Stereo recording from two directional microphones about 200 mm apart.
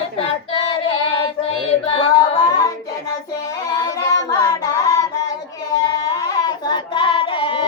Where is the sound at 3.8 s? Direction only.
15° left (ahead or behind).